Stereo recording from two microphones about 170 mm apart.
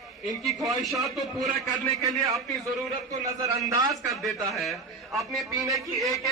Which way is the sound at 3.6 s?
20° right (ahead or behind).